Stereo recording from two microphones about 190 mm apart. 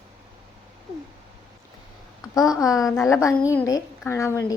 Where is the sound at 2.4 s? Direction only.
15° left (ahead or behind).